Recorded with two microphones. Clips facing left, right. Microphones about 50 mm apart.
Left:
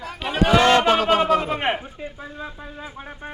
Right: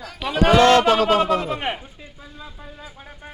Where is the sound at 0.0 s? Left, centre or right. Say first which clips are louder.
Even; left.